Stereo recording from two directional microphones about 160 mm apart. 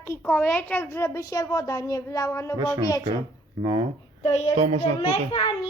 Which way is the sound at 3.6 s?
35° right (ahead or behind).